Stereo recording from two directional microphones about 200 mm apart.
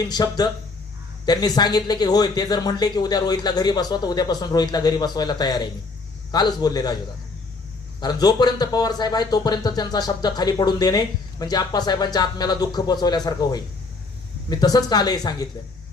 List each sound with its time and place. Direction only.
0.0 s speech: 20° left (ahead or behind)
8.0 s speech: 20° left (ahead or behind)